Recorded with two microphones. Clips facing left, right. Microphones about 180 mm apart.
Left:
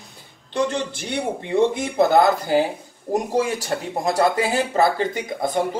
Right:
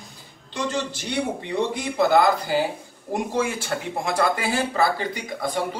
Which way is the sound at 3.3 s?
40° left (ahead or behind).